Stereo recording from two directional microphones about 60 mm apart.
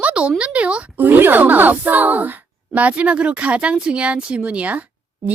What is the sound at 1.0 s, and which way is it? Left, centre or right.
Speech, right.